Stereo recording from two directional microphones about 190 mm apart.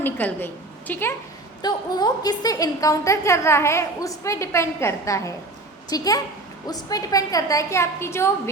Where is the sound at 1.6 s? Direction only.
20° left (ahead or behind).